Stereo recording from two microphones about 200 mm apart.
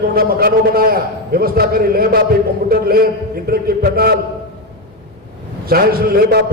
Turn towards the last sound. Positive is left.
turn(degrees=-50)  # may be behind; listen again after turning